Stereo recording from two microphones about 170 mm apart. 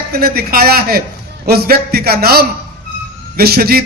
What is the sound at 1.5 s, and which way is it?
A man's voice, 65° right (ahead or behind).